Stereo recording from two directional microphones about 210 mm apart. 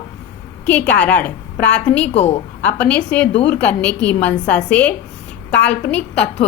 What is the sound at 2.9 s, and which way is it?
A woman's voice, 5° left (ahead or behind).